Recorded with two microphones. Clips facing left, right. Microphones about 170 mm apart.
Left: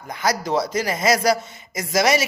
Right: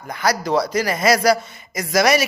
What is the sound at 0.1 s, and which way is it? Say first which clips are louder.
A man's voice: right 2 dB; 20° left (ahead or behind).